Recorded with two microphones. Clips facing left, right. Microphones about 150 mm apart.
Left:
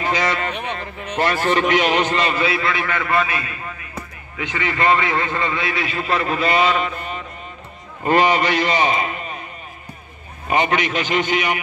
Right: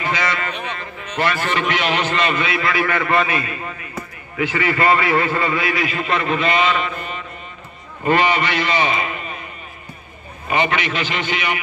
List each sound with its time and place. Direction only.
0.0 s a sound: 35° left (ahead or behind)
1.1 s a man's voice: 35° left (ahead or behind)
3.1 s a man's voice: 20° right (ahead or behind)
4.4 s a man's voice: 20° left (ahead or behind); by 9.4 s 40° left (ahead or behind)
10.5 s a man's voice: 40° left (ahead or behind)